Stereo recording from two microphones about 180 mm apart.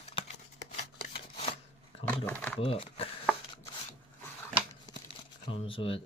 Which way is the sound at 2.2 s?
10° left (ahead or behind).